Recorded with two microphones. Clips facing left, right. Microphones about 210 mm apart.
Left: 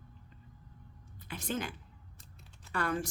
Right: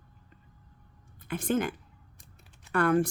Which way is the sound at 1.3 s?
50° right (ahead or behind).